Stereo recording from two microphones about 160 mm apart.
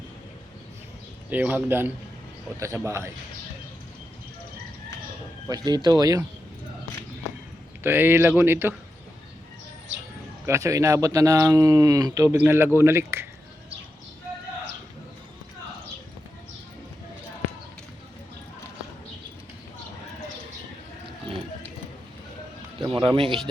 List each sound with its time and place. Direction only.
1.3 s speech: 10° right (ahead or behind)
5.5 s speech: 25° right (ahead or behind)
7.9 s speech: 15° right (ahead or behind)
10.4 s speech: 20° right (ahead or behind)
22.8 s a sound: 30° right (ahead or behind)